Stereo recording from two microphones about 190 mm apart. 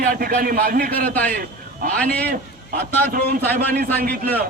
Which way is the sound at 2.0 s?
5° left (ahead or behind).